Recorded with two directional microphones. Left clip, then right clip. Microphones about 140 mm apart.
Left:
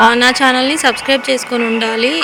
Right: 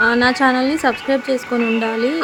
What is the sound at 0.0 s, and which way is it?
Speech, 40° left (ahead or behind).